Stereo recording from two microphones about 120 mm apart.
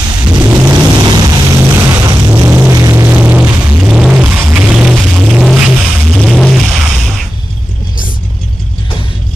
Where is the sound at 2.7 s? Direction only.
30° right (ahead or behind).